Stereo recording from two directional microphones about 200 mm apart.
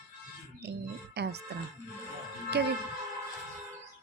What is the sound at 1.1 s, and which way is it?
Speech, 55° right (ahead or behind).